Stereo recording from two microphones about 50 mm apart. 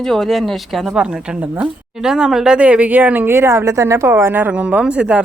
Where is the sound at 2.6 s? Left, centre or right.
Right.